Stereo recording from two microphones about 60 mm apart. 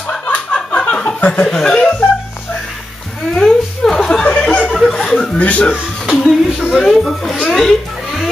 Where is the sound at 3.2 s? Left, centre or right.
Centre.